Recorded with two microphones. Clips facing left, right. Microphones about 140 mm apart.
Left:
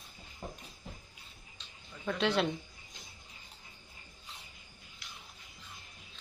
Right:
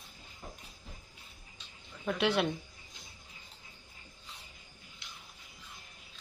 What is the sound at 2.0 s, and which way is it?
Speech, 5° right (ahead or behind).